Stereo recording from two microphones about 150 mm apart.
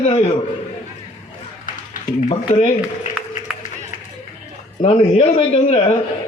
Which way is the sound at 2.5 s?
50° left (ahead or behind).